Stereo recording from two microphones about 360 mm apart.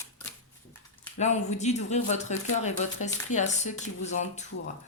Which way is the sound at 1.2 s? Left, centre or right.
Centre.